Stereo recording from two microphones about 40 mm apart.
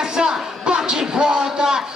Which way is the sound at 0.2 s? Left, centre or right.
Centre.